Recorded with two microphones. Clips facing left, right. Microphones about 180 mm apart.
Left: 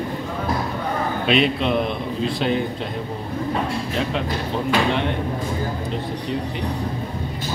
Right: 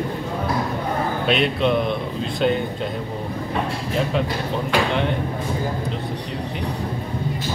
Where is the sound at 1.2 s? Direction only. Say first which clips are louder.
Left 1 dB; centre (ahead or behind).